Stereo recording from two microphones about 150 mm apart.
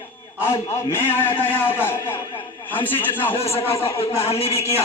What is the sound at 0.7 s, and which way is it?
A man's voice, 15° left (ahead or behind).